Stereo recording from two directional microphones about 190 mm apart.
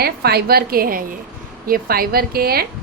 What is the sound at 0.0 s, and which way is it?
A woman's voice, 55° right (ahead or behind).